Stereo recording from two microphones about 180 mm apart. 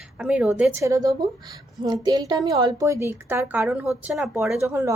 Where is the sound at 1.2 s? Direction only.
Centre (ahead or behind).